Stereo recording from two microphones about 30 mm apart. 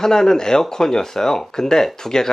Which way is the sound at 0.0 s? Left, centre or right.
Centre.